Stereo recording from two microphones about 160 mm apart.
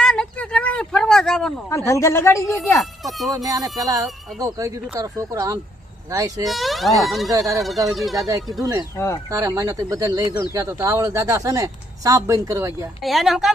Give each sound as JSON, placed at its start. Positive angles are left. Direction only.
{"t": 0.0, "sound": "a sound", "side_deg": 5}
{"t": 1.7, "sound": "a woman's voice", "side_deg": 20}
{"t": 2.7, "sound": "speech", "side_deg": 0}
{"t": 3.3, "sound": "speech", "side_deg": -20}
{"t": 6.4, "sound": "speech", "side_deg": 0}
{"t": 7.3, "sound": "speech", "side_deg": -20}
{"t": 7.9, "sound": "speech", "side_deg": 0}
{"t": 9.3, "sound": "speech", "side_deg": -20}
{"t": 13.0, "sound": "speech", "side_deg": 0}